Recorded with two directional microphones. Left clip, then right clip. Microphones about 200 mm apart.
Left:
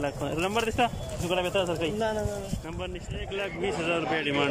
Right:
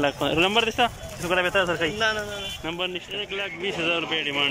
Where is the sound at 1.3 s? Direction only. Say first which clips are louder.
Right 5 dB; 15° left (ahead or behind).